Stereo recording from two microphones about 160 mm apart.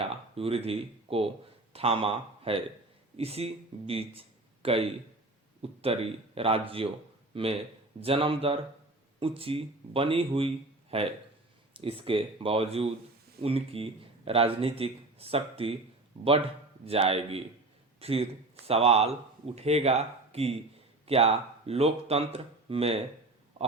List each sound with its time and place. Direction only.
0.0 s speech: 35° right (ahead or behind)
16.8 s speech: 40° right (ahead or behind)